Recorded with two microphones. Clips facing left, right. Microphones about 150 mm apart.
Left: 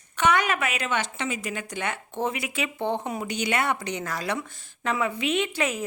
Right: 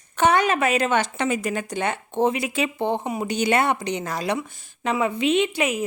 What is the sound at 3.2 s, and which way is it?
Speech, 30° right (ahead or behind).